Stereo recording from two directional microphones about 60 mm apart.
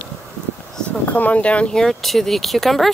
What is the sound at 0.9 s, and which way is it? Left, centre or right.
Speech, left.